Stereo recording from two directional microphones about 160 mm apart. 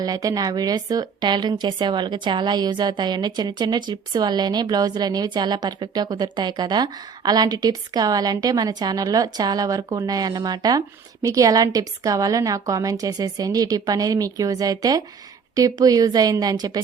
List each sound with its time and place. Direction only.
0.0 s a woman's voice: 25° right (ahead or behind)